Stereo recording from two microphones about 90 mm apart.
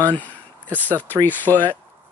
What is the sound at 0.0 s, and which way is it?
Speech, 20° left (ahead or behind).